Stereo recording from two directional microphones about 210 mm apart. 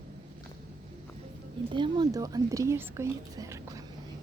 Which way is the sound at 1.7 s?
20° right (ahead or behind).